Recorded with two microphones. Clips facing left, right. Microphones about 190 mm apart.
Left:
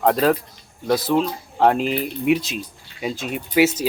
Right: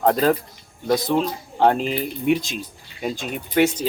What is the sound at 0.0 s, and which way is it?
Speech, centre (ahead or behind).